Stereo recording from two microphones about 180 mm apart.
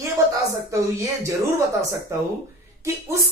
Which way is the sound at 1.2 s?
15° right (ahead or behind).